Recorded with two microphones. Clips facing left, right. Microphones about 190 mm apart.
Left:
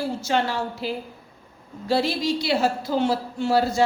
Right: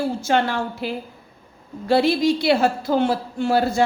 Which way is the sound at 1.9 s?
55° right (ahead or behind).